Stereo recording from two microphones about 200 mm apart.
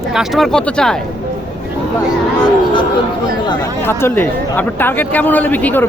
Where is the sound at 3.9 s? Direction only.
10° left (ahead or behind).